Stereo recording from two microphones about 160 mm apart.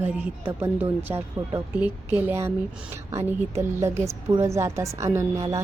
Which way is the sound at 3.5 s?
15° right (ahead or behind).